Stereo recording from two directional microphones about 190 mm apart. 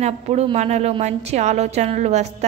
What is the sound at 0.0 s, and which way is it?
A woman's voice, 35° right (ahead or behind).